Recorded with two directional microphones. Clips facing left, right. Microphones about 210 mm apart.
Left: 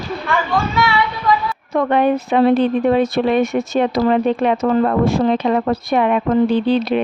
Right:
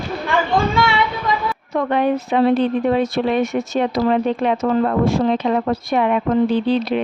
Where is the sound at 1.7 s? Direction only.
60° left (ahead or behind).